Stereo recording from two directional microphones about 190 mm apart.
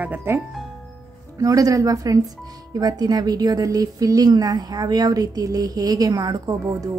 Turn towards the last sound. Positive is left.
turn(degrees=-20)  # may be behind; listen again after turning